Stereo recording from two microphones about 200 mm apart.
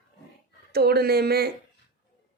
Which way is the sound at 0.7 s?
55° right (ahead or behind).